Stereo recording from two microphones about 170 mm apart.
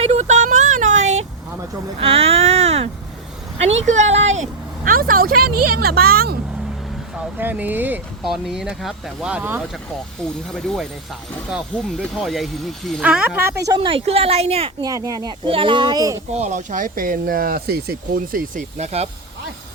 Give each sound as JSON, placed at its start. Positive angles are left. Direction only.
{"t": 0.0, "sound": "a sound", "side_deg": -40}
{"t": 2.0, "sound": "speech", "side_deg": -35}
{"t": 4.9, "sound": "speech", "side_deg": -55}
{"t": 7.3, "sound": "speech", "side_deg": -10}
{"t": 11.5, "sound": "speech", "side_deg": 0}
{"t": 13.7, "sound": "speech", "side_deg": -30}
{"t": 14.8, "sound": "a child's voice", "side_deg": -20}
{"t": 16.3, "sound": "speech", "side_deg": -45}
{"t": 18.8, "sound": "speech", "side_deg": -40}